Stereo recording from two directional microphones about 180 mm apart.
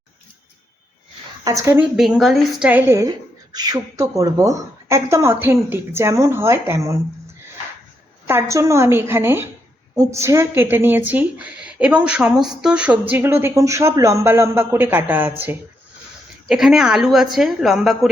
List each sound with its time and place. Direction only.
1.5 s a woman's voice: 20° right (ahead or behind)
2.0 s a woman's voice: centre (ahead or behind)
8.3 s a woman's voice: 15° right (ahead or behind)